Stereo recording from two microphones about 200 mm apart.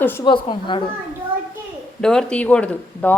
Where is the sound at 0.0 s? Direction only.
10° left (ahead or behind).